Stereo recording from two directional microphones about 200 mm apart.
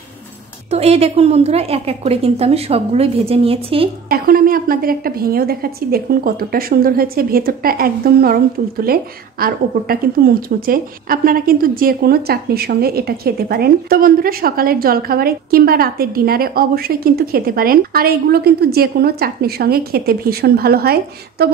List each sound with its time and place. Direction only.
0.7 s a woman's voice: 30° right (ahead or behind)
4.1 s a woman's voice: 45° right (ahead or behind)